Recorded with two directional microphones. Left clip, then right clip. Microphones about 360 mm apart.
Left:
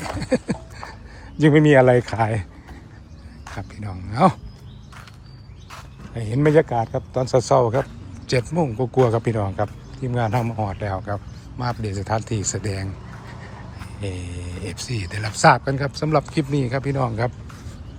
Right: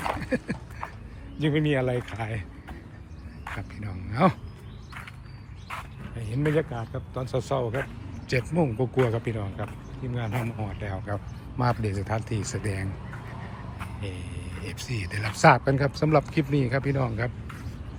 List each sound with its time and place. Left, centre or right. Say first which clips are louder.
0.2 s a sound: left 7 dB; centre
1.5 s speech: left 13 dB; centre
3.4 s speech: left 2 dB; centre
6.1 s speech: left 10 dB; centre
14.0 s speech: left 6 dB; centre